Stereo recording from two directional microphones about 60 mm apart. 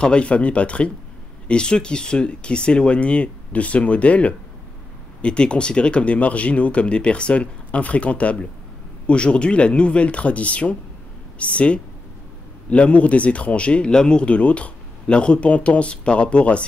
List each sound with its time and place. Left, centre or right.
0.0 s speech: centre